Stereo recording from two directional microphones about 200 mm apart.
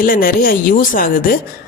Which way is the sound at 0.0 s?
45° left (ahead or behind).